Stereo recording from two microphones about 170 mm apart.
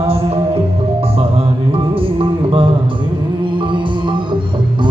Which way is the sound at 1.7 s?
30° right (ahead or behind).